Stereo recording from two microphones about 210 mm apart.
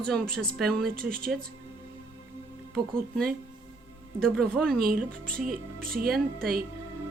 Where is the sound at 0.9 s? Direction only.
45° right (ahead or behind).